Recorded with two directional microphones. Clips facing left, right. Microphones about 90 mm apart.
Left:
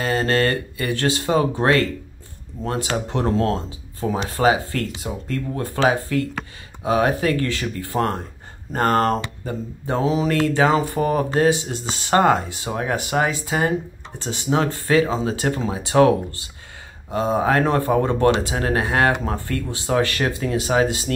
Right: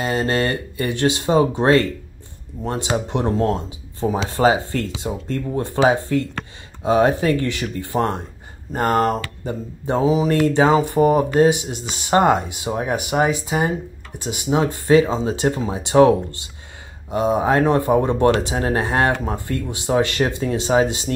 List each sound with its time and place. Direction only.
0.0 s speech: 20° right (ahead or behind)
4.3 s speech: 30° right (ahead or behind)
19.2 s speech: 15° right (ahead or behind)